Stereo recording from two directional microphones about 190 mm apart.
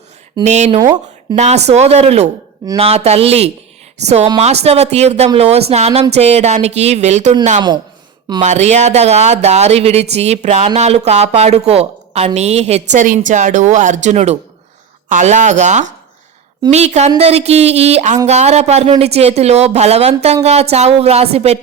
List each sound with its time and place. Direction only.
0.4 s speech: 35° right (ahead or behind)
0.8 s speech: 20° right (ahead or behind)
1.4 s speech: 35° right (ahead or behind)
8.4 s speech: 35° right (ahead or behind)